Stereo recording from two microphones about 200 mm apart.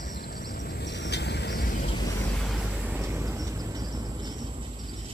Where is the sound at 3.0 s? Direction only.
15° right (ahead or behind).